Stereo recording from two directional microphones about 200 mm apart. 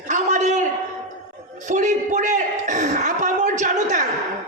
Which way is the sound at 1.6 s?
40° right (ahead or behind).